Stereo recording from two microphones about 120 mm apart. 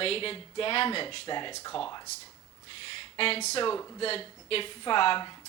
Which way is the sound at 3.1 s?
55° left (ahead or behind).